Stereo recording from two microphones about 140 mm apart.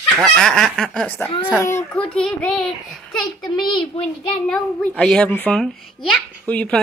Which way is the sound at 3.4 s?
35° left (ahead or behind).